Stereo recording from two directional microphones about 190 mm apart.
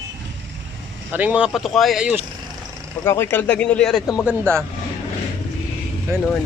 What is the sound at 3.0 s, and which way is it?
Speech, 15° left (ahead or behind).